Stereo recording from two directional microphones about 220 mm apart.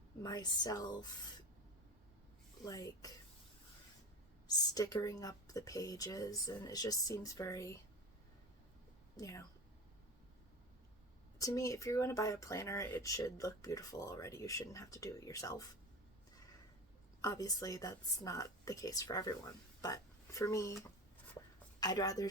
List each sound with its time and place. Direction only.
0.2 s speech: 15° left (ahead or behind)
2.6 s speech: 15° left (ahead or behind)
4.4 s speech: 15° left (ahead or behind)
9.1 s speech: 15° left (ahead or behind)
11.3 s speech: 15° left (ahead or behind)
17.2 s speech: 15° left (ahead or behind)
21.8 s speech: 15° left (ahead or behind)